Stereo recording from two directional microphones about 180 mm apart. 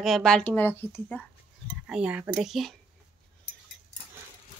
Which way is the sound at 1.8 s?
5° right (ahead or behind).